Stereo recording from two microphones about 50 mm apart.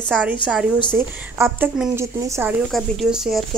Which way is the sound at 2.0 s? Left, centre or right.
Right.